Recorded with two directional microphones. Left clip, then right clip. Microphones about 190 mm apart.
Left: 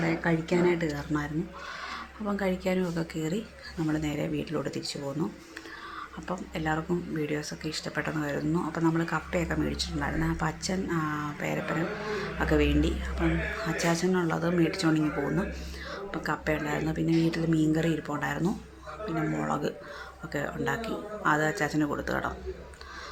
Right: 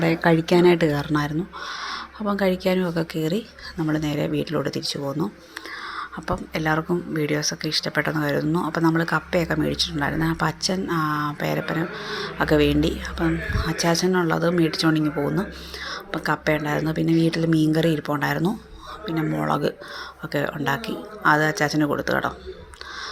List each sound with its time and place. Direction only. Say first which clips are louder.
0.0 s speech: right 9 dB; 40° right (ahead or behind)